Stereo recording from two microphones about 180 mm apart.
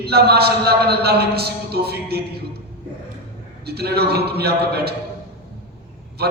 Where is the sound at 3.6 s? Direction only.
60° right (ahead or behind).